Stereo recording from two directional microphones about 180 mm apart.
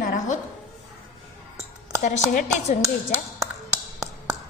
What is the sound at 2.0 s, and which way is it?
Speech, 40° left (ahead or behind).